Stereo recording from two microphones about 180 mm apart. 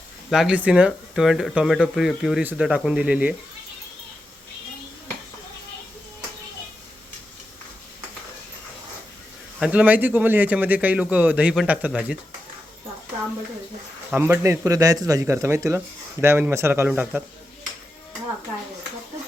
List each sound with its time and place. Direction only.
0.3 s speech: 5° right (ahead or behind)
9.6 s a man's voice: 5° right (ahead or behind)
14.1 s a man's voice: 15° right (ahead or behind)